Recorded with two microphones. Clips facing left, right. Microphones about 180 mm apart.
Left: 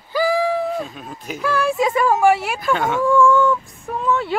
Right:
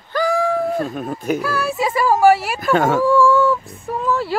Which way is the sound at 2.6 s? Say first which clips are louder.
Right 4 dB; 45° right (ahead or behind).